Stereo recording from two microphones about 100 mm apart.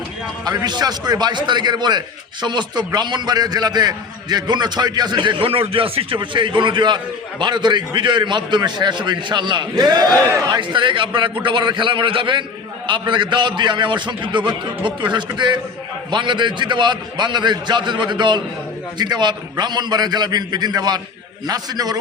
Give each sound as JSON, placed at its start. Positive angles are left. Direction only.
{"t": 0.4, "sound": "a man's voice", "side_deg": -40}
{"t": 10.6, "sound": "a man's voice", "side_deg": -55}